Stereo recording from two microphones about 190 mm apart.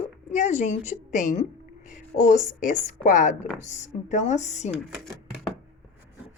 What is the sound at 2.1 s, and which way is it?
A woman's voice, 50° left (ahead or behind).